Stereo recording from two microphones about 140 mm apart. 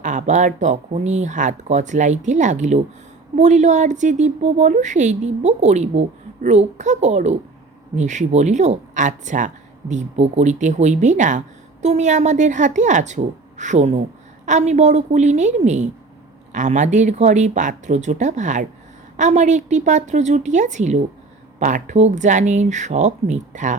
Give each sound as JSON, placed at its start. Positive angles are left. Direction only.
{"t": 0.0, "sound": "speech", "side_deg": -60}